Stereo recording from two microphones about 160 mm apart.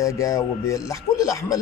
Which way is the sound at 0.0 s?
20° left (ahead or behind).